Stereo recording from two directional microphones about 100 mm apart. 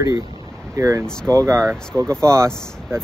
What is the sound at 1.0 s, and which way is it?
Speech, 5° left (ahead or behind).